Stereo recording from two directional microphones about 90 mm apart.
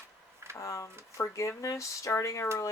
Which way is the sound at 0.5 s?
35° left (ahead or behind).